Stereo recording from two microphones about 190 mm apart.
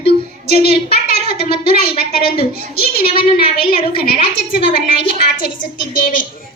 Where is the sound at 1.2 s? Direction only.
30° left (ahead or behind).